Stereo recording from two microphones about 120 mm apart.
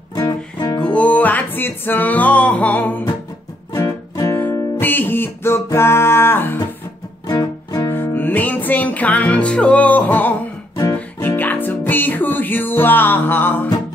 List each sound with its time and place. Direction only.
0.1 s music: 30° left (ahead or behind)
0.8 s music: 10° left (ahead or behind)
3.7 s music: 25° left (ahead or behind)
7.2 s music: 30° left (ahead or behind)
7.9 s music: 15° left (ahead or behind)